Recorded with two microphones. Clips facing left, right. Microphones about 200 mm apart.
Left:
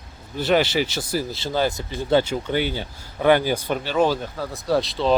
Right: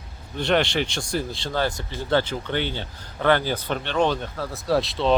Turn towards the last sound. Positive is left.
turn(degrees=0)  # may be behind; listen again after turning